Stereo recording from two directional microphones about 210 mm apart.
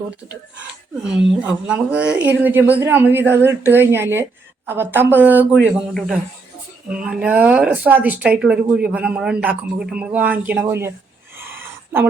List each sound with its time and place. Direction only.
1.1 s a man's voice: 5° right (ahead or behind)